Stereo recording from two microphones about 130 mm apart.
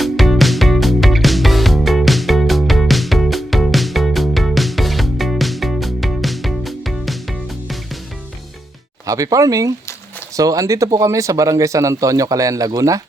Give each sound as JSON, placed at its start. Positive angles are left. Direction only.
{"t": 0.0, "sound": "music", "side_deg": 0}
{"t": 9.0, "sound": "speech", "side_deg": -25}